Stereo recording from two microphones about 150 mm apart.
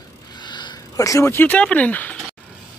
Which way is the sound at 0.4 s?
30° left (ahead or behind).